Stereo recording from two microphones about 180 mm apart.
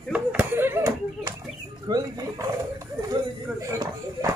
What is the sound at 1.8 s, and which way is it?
Rodents, 20° right (ahead or behind).